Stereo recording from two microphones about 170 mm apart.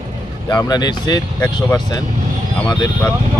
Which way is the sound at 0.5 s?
25° left (ahead or behind).